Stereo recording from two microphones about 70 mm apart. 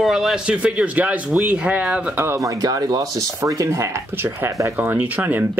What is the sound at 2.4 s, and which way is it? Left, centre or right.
Speech, right.